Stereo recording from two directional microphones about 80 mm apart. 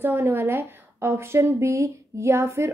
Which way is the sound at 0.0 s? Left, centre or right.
Right.